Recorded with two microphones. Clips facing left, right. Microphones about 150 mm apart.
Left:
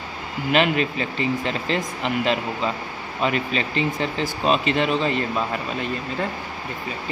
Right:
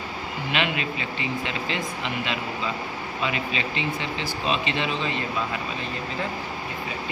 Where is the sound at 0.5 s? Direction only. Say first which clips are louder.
Left 7 dB; 40° left (ahead or behind).